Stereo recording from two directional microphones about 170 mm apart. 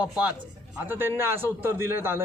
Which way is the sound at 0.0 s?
5° right (ahead or behind).